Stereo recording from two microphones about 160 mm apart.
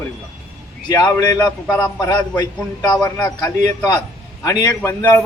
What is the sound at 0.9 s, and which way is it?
A man's voice, 20° left (ahead or behind).